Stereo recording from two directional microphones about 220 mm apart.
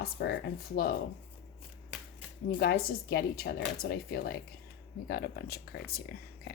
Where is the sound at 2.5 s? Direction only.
45° left (ahead or behind).